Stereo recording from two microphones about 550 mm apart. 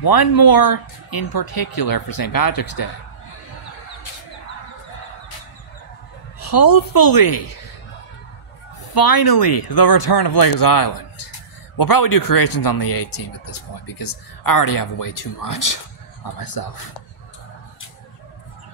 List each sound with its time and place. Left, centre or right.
0.0 s speech: left
6.4 s speech: left
8.9 s speech: left